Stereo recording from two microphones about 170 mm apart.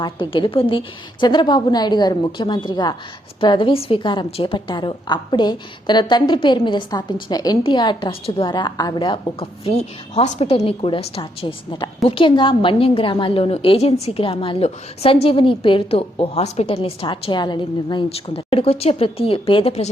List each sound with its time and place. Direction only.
0.0 s a woman's voice: 30° left (ahead or behind)